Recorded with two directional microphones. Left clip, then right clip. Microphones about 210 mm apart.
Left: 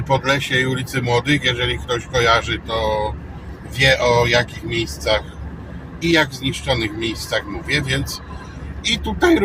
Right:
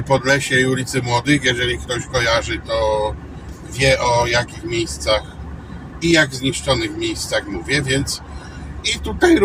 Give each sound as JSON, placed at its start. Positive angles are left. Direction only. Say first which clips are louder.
{"t": 0.1, "sound": "speech", "louder": "right 2 dB", "side_deg": 10}
{"t": 3.8, "sound": "speech", "louder": "left 1 dB", "side_deg": 15}